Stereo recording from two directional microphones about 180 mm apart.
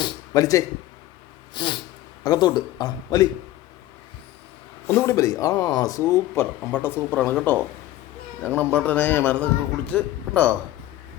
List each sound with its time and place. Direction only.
0.0 s a sound: 20° left (ahead or behind)
1.5 s speech: 25° left (ahead or behind)
4.9 s a man's voice: 15° left (ahead or behind)